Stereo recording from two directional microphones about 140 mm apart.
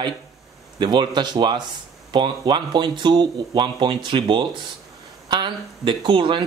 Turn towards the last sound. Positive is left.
turn(degrees=-35)  # may be behind; listen again after turning